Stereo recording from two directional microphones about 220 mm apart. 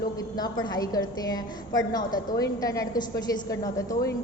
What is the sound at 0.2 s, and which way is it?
A woman's voice, 20° left (ahead or behind).